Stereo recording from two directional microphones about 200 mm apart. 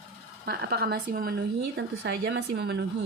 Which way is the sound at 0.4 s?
55° right (ahead or behind).